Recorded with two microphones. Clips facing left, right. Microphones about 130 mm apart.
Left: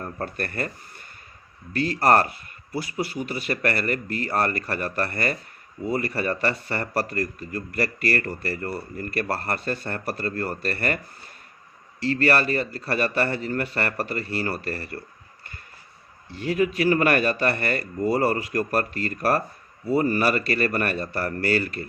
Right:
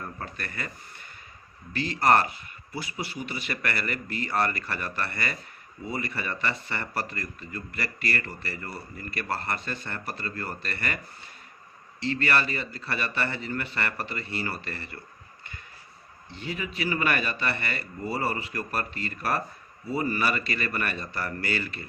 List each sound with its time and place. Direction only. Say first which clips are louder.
0.0 s speech: left 7 dB; 45° left (ahead or behind)
12.0 s speech: left 5 dB; 45° left (ahead or behind)
16.3 s speech: left 11 dB; 45° left (ahead or behind)